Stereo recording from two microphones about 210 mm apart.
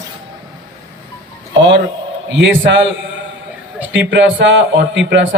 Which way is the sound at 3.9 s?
60° right (ahead or behind).